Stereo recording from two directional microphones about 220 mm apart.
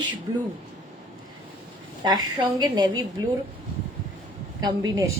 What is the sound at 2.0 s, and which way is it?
A woman's voice, 20° right (ahead or behind).